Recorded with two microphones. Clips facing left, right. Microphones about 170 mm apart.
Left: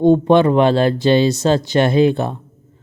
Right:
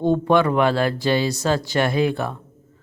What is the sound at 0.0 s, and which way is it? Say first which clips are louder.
Speech: left 6 dB; 25° left (ahead or behind).